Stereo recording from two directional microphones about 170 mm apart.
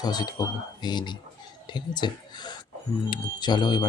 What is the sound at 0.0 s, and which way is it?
Speech, 25° left (ahead or behind).